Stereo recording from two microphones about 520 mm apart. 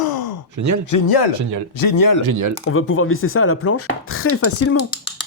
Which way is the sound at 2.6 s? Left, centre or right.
Left.